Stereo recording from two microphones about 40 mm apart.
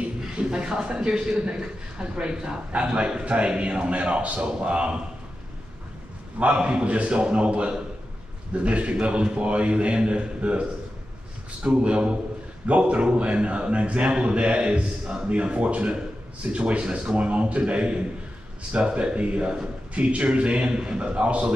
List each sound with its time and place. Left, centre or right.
0.4 s a man's voice: right
6.4 s a man's voice: right